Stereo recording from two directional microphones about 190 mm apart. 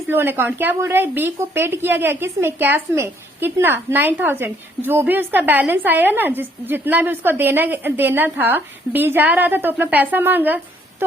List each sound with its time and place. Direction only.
0.1 s a woman's voice: 10° right (ahead or behind)